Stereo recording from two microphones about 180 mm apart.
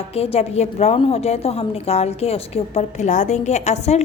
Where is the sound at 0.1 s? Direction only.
35° left (ahead or behind).